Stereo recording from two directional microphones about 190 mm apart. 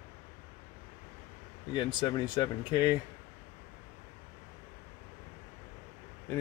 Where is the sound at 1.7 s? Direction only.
25° left (ahead or behind).